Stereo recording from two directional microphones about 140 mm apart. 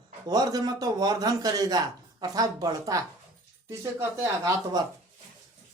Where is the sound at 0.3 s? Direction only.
25° right (ahead or behind).